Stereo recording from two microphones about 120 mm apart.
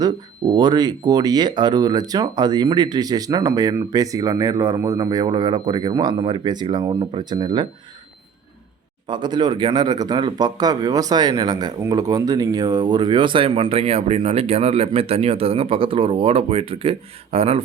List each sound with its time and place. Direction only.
0.0 s speech: 35° right (ahead or behind)
9.0 s speech: 40° right (ahead or behind); by 17.6 s 60° right (ahead or behind)